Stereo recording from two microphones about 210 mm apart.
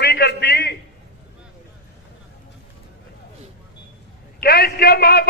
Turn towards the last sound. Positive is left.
turn(degrees=50)  # may be behind; listen again after turning